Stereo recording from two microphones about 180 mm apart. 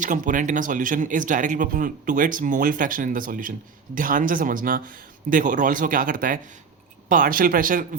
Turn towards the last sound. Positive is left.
turn(degrees=-50)  # may be behind; listen again after turning